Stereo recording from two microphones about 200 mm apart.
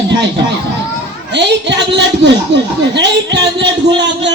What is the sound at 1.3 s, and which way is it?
A man's voice, 60° right (ahead or behind).